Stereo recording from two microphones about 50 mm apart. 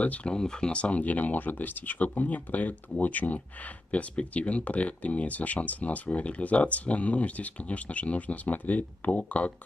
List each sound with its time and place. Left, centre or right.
0.0 s speech: left
0.3 s speech: centre